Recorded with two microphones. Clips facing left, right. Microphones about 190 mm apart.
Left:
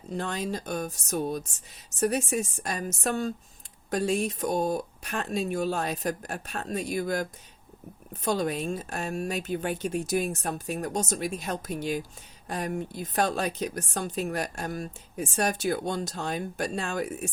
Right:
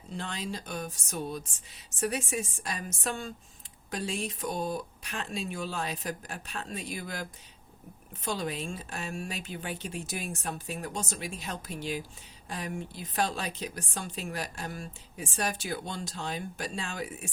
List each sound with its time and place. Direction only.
0.1 s a woman's voice: 45° left (ahead or behind)